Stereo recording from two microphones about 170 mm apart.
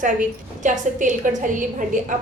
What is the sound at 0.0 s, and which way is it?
A woman's voice, 50° right (ahead or behind).